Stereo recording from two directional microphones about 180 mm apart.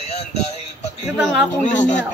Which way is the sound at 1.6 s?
40° left (ahead or behind).